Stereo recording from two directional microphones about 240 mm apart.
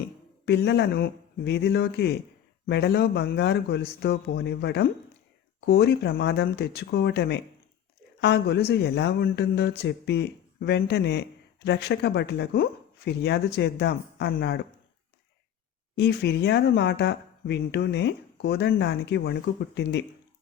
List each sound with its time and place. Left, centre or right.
0.0 s speech: left
16.0 s speech: left